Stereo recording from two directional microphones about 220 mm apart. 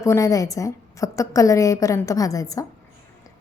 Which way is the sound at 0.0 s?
15° left (ahead or behind).